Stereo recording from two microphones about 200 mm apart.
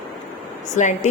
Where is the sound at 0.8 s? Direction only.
40° left (ahead or behind).